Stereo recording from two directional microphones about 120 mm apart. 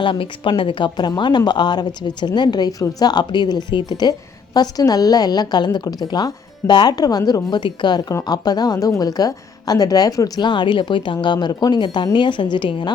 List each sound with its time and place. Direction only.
0.0 s a woman's voice: 45° left (ahead or behind)